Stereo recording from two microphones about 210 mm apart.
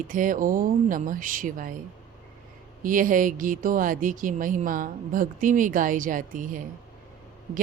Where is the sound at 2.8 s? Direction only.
40° right (ahead or behind).